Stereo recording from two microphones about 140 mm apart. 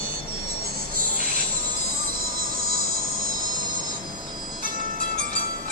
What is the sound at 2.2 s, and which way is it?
Music, 90° right.